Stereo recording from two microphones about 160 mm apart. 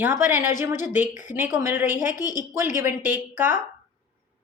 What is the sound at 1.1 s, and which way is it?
Speech, 55° left (ahead or behind).